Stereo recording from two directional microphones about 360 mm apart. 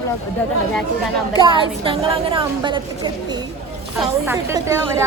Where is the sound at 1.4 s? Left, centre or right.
Centre.